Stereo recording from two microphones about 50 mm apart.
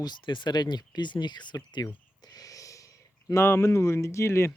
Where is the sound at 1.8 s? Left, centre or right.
Left.